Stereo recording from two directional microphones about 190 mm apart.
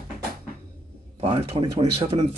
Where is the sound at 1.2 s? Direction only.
25° right (ahead or behind).